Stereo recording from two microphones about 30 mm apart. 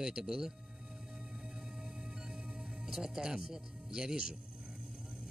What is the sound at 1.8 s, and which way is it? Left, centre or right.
Music, centre.